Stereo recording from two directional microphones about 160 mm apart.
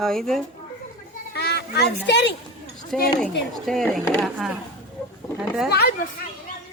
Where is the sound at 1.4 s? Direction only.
90° left.